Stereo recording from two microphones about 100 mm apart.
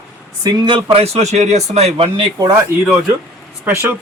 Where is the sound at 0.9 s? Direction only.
85° right.